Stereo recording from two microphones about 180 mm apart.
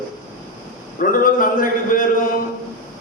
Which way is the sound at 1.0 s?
50° left (ahead or behind).